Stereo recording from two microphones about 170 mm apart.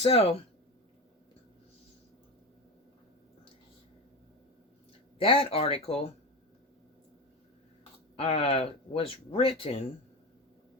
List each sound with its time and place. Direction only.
0.0 s speech: 35° left (ahead or behind)
5.2 s speech: 35° left (ahead or behind)
8.1 s speech: 35° left (ahead or behind)